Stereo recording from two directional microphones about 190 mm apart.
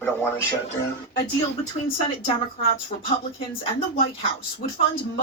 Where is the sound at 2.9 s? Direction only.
40° left (ahead or behind).